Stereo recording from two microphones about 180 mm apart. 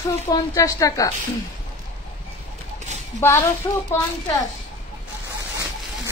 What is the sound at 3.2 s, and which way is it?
Speech, 15° left (ahead or behind).